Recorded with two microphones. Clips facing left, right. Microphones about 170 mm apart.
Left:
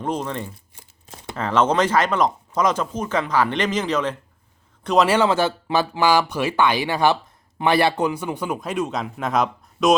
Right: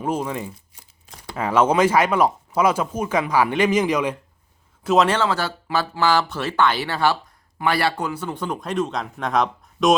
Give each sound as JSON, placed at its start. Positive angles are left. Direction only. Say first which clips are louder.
{"t": 0.0, "sound": "a man's voice", "louder": "right 1 dB", "side_deg": -10}
{"t": 5.0, "sound": "speech", "louder": "left 3 dB", "side_deg": 15}